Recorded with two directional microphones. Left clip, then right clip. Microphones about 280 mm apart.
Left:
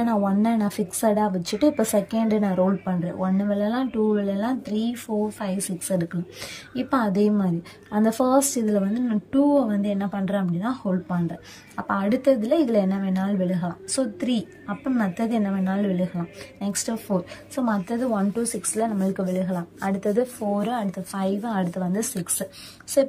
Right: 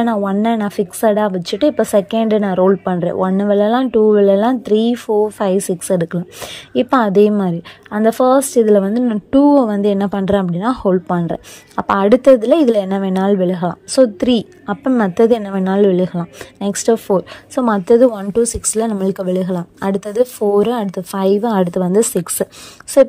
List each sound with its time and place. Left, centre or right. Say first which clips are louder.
0.0 s a woman's voice: right 7 dB; centre